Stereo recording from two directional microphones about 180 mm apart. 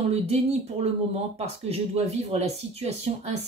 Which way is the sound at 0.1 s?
35° right (ahead or behind).